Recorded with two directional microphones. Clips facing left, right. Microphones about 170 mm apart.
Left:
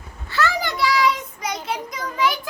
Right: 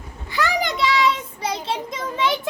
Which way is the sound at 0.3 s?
15° right (ahead or behind).